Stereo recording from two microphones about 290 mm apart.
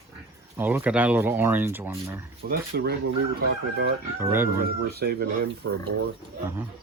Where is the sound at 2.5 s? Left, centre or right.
Right.